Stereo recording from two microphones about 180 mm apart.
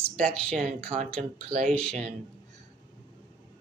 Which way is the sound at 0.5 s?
45° right (ahead or behind).